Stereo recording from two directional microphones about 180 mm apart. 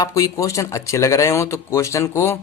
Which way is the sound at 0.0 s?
20° left (ahead or behind).